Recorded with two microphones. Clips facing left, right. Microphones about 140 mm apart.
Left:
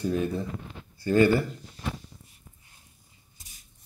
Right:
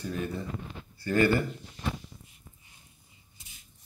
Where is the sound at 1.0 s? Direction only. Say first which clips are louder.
Left 4 dB; 20° left (ahead or behind).